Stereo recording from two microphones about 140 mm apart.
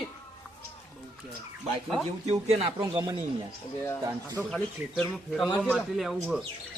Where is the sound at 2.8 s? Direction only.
25° right (ahead or behind).